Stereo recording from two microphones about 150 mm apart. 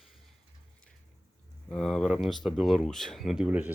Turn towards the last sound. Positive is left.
turn(degrees=-10)  # may be behind; listen again after turning